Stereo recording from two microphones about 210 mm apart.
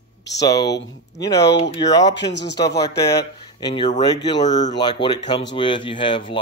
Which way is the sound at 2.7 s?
15° left (ahead or behind).